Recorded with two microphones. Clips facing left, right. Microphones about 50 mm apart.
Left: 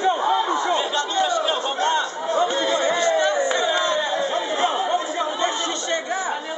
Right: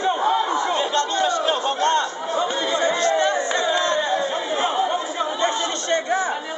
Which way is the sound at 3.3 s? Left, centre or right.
Centre.